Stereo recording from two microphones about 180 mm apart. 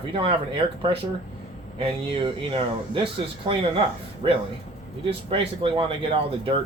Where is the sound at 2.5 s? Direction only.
30° right (ahead or behind).